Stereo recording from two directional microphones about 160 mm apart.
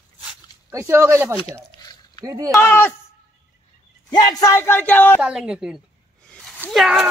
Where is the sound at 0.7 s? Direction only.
15° right (ahead or behind).